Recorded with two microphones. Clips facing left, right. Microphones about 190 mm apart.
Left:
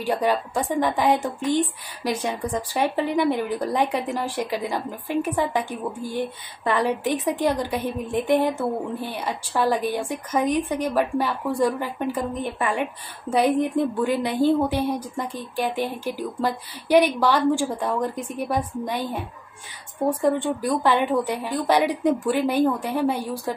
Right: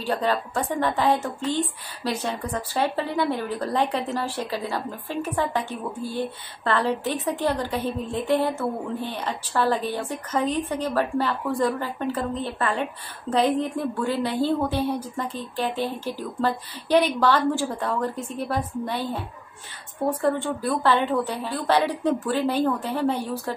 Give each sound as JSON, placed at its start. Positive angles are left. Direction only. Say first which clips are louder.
{"t": 0.0, "sound": "a woman's voice", "louder": "left 2 dB", "side_deg": 10}